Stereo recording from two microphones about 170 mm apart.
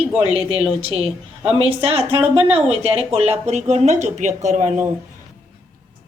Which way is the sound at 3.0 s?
35° right (ahead or behind).